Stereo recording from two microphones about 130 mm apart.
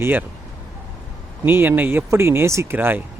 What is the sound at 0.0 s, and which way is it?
Speech, 15° right (ahead or behind).